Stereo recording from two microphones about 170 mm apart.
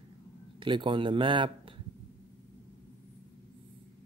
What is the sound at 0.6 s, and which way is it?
Speech, 30° right (ahead or behind).